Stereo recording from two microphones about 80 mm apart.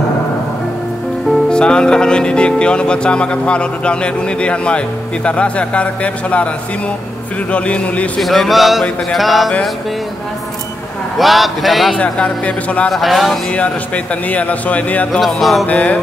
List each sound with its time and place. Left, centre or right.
1.5 s speech: centre
7.5 s speech: centre
8.2 s speech: centre
11.1 s speech: centre
12.0 s speech: centre
12.9 s speech: centre
13.5 s speech: centre
15.1 s speech: centre
15.6 s speech: centre